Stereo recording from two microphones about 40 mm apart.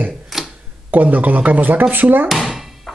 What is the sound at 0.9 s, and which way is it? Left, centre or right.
Speech, right.